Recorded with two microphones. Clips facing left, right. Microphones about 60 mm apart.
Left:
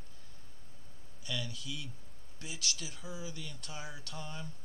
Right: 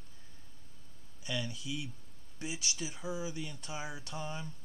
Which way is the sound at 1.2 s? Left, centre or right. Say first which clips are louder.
Right 3 dB; centre.